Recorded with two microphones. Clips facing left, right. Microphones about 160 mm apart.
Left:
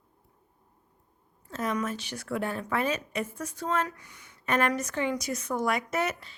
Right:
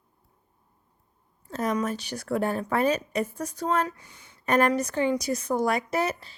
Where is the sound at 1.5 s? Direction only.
40° right (ahead or behind).